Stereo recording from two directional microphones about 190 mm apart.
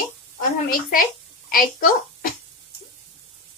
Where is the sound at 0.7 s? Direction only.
50° left (ahead or behind).